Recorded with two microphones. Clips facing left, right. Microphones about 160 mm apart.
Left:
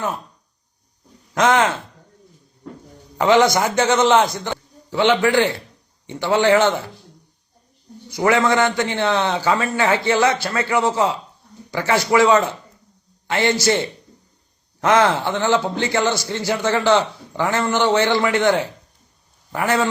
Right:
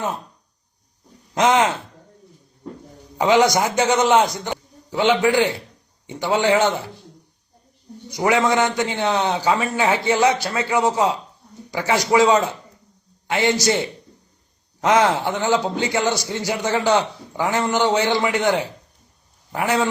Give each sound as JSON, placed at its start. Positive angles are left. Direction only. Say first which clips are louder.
{"t": 1.3, "sound": "speech", "louder": "even", "side_deg": -20}
{"t": 3.2, "sound": "a man's voice", "louder": "left 1 dB", "side_deg": -15}
{"t": 8.1, "sound": "a man's voice", "louder": "left 1 dB", "side_deg": -20}